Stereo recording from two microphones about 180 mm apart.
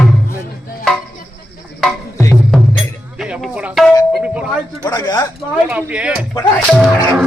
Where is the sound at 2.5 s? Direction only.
5° left (ahead or behind).